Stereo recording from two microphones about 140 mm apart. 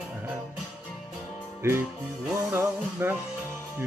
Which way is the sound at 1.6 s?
15° right (ahead or behind).